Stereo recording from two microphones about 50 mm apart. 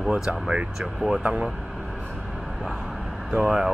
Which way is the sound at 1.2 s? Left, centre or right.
Right.